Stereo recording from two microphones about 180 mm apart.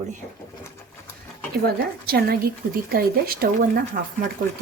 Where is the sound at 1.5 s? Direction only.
60° right (ahead or behind).